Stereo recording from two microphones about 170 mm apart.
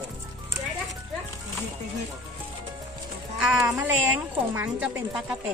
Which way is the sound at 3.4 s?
5° right (ahead or behind).